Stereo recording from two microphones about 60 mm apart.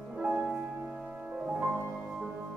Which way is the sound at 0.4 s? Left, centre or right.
Centre.